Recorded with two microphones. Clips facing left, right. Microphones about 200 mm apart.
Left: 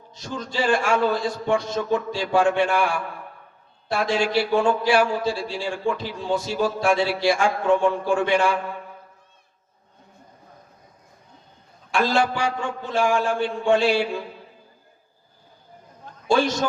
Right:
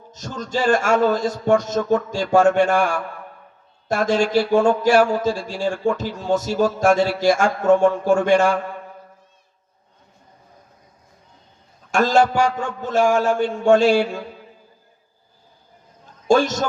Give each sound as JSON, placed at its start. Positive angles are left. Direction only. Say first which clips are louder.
{"t": 0.1, "sound": "a man's voice", "louder": "right 5 dB", "side_deg": -45}
{"t": 11.9, "sound": "a man's voice", "louder": "right 5 dB", "side_deg": -45}
{"t": 16.2, "sound": "a man's voice", "louder": "right 4 dB", "side_deg": -45}